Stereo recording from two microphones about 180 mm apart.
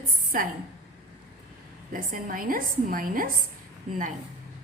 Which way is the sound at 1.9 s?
50° right (ahead or behind).